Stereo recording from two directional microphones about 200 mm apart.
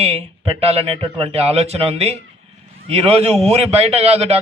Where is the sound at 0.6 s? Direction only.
30° right (ahead or behind).